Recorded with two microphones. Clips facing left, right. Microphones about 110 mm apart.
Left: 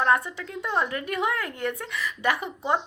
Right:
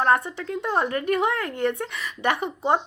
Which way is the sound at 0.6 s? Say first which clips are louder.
Right 3 dB; 35° right (ahead or behind).